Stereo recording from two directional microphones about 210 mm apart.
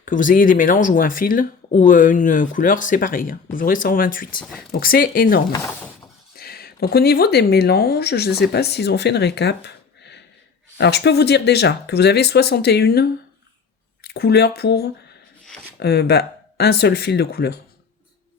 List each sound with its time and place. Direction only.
0.0 s speech: 40° left (ahead or behind)